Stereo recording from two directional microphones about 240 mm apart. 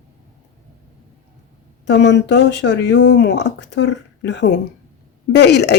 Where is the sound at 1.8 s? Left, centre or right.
Left.